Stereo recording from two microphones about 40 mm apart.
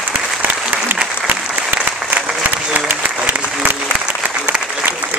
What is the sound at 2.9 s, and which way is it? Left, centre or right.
Applause, right.